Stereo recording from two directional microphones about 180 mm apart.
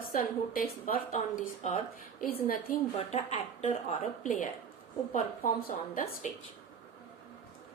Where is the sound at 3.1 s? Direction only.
35° left (ahead or behind).